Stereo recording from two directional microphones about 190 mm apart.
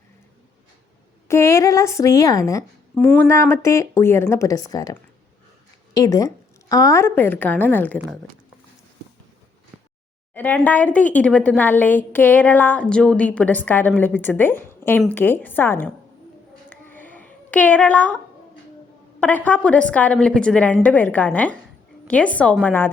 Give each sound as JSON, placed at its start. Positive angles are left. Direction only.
{"t": 1.3, "sound": "a woman's voice", "side_deg": 15}
{"t": 10.3, "sound": "a woman's voice", "side_deg": 10}
{"t": 16.6, "sound": "a sound", "side_deg": 10}
{"t": 19.2, "sound": "a woman's voice", "side_deg": 10}